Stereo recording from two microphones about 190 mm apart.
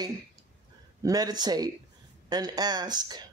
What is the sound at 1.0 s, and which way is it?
Speech, 20° right (ahead or behind).